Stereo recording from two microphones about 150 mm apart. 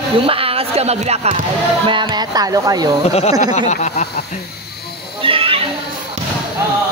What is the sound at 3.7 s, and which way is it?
Speech, 50° left (ahead or behind).